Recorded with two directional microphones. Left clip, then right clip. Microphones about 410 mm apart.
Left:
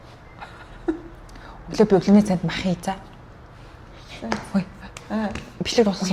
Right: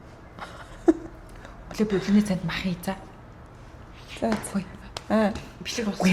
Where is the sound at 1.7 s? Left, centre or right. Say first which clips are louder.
Left 8 dB; left.